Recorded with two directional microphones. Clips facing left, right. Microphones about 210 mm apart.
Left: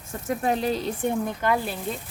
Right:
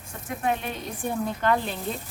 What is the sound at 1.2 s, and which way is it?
Speech, 5° left (ahead or behind).